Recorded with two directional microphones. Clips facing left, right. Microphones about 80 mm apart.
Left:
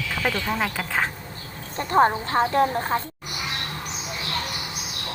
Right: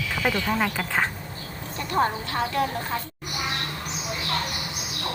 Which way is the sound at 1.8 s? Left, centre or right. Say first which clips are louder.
Left 5 dB; left.